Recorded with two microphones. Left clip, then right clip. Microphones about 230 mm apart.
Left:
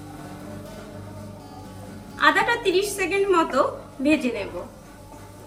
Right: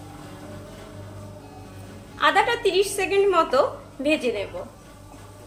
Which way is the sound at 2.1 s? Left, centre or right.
Right.